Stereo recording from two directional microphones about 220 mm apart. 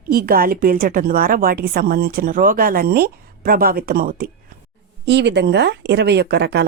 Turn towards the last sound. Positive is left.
turn(degrees=-50)  # may be behind; listen again after turning